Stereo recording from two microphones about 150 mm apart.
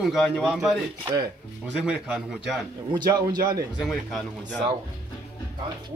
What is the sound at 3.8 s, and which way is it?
Speech, centre (ahead or behind).